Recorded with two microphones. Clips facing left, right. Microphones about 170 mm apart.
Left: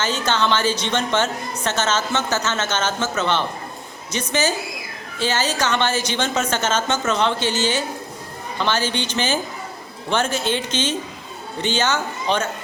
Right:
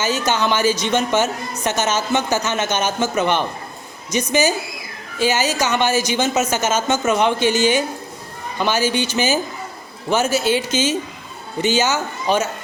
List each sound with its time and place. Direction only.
0.0 s a woman's voice: 10° right (ahead or behind)